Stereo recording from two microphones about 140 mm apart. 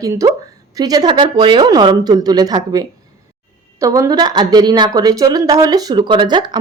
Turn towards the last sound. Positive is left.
turn(degrees=-35)  # may be behind; listen again after turning